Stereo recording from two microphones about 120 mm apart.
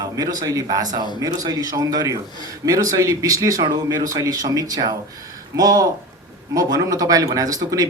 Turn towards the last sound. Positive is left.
turn(degrees=-30)  # may be behind; listen again after turning